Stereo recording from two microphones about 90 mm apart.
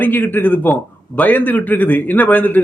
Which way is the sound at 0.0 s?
20° left (ahead or behind).